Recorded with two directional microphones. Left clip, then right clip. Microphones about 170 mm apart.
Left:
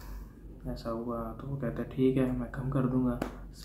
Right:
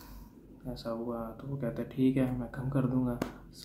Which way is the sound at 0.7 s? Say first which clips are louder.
Left 1 dB; 15° right (ahead or behind).